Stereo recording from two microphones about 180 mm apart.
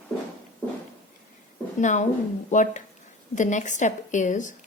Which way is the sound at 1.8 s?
45° left (ahead or behind).